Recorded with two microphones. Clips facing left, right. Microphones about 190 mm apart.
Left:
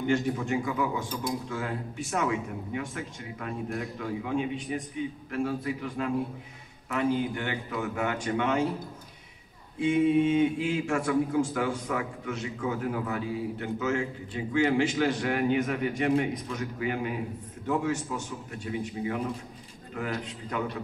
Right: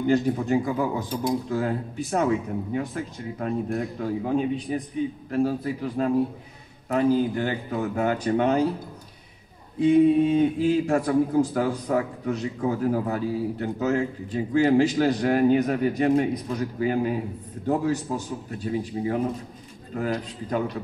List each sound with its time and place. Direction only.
0.0 s a man's voice: 35° right (ahead or behind)
9.8 s a man's voice: 35° right (ahead or behind)